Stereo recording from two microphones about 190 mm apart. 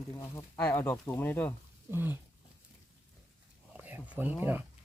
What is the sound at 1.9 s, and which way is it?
Speech, 10° right (ahead or behind).